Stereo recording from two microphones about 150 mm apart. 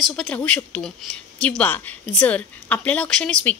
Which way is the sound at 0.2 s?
10° left (ahead or behind).